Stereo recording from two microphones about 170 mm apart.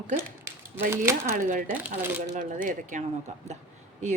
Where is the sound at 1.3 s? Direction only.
50° right (ahead or behind).